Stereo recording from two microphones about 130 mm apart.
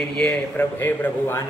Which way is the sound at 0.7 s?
20° left (ahead or behind).